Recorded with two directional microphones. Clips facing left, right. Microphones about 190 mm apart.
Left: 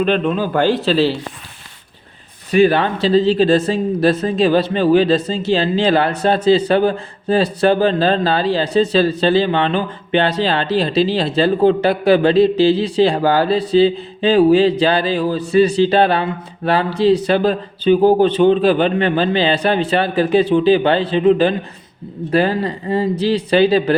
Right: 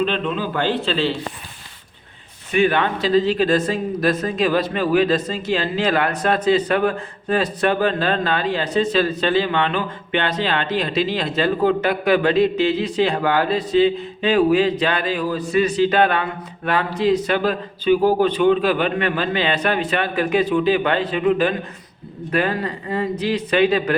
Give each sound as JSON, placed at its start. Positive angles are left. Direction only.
{"t": 0.0, "sound": "a man's voice", "side_deg": 45}
{"t": 2.5, "sound": "speech", "side_deg": 35}